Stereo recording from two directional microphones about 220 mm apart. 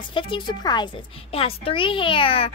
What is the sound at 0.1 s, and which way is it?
A woman's voice, 20° left (ahead or behind).